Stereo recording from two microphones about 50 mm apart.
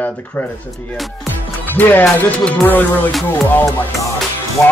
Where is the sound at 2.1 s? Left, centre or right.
Left.